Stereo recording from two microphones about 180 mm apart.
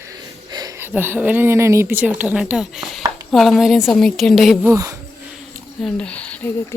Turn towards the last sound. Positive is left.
turn(degrees=10)  # may be behind; listen again after turning